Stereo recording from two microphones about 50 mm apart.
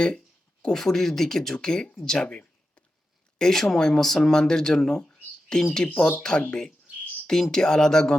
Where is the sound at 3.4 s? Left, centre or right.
Centre.